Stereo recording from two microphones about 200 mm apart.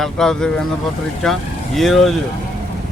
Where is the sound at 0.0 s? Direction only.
Centre (ahead or behind).